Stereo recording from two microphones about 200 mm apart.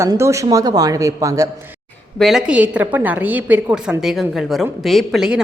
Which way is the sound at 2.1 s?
Centre (ahead or behind).